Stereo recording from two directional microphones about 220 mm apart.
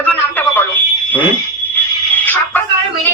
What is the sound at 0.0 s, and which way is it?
Telephone, 10° left (ahead or behind).